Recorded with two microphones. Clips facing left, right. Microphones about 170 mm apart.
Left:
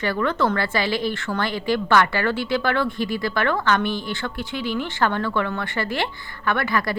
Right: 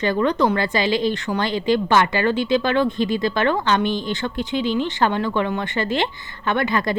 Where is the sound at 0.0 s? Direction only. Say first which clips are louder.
Right 3 dB; 20° right (ahead or behind).